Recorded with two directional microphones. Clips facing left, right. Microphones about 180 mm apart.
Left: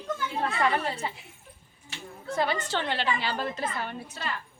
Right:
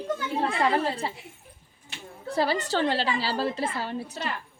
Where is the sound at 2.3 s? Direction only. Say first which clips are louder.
Right 3 dB; 35° right (ahead or behind).